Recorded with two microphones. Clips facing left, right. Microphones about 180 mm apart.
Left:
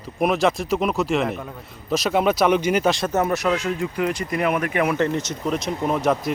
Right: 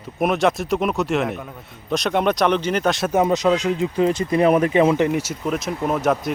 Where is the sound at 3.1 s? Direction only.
15° right (ahead or behind).